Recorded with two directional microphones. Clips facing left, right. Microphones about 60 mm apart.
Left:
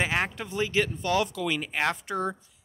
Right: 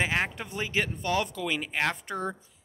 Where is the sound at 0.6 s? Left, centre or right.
Centre.